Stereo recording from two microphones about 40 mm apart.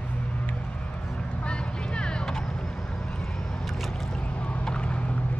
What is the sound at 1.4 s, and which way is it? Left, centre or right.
Vehicle, left.